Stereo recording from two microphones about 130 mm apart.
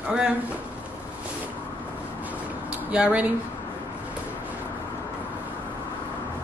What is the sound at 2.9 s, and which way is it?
Speech, 10° right (ahead or behind).